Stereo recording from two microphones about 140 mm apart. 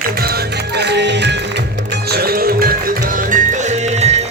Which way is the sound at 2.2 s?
90° right.